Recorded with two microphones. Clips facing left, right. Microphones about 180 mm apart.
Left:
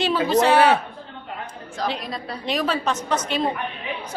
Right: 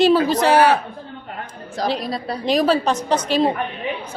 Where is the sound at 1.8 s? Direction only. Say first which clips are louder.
Right 5 dB; 35° right (ahead or behind).